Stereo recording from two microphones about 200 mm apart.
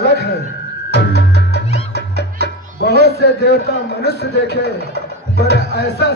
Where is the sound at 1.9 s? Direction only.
55° left (ahead or behind).